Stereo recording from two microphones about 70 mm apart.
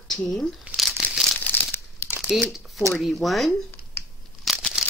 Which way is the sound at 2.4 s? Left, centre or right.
Centre.